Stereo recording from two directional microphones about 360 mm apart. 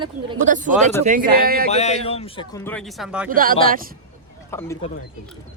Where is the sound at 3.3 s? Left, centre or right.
Right.